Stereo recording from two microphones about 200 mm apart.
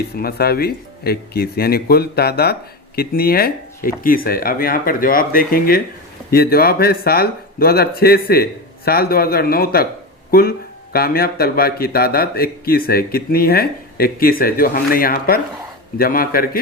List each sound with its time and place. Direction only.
0.1 s speech: 50° left (ahead or behind)
10.9 s speech: 50° left (ahead or behind)